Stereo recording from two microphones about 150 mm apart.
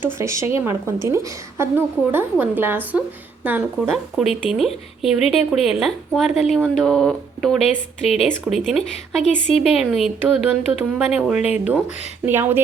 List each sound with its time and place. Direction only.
0.0 s a woman's voice: 20° right (ahead or behind); by 8.8 s centre (ahead or behind)
9.2 s a woman's voice: 45° left (ahead or behind)
9.9 s a woman's voice: centre (ahead or behind)